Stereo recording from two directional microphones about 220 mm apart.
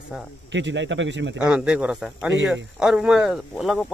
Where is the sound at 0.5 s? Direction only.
55° right (ahead or behind).